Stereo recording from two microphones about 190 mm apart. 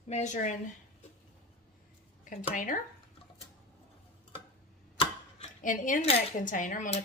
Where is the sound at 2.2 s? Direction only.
40° left (ahead or behind).